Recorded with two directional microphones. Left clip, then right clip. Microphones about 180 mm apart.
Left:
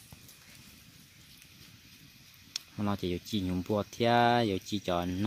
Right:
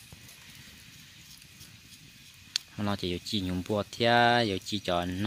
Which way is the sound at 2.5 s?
5° left (ahead or behind).